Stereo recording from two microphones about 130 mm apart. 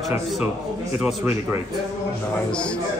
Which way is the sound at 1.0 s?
15° right (ahead or behind).